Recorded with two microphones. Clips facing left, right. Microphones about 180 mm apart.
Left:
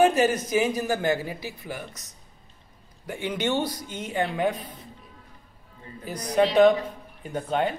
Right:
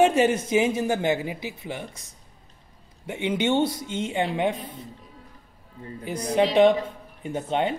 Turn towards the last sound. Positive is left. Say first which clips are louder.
# right 1 dB
turn(degrees=-25)  # may be behind; listen again after turning